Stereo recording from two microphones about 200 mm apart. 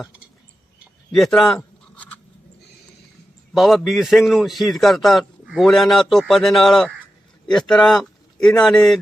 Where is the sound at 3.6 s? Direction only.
Centre (ahead or behind).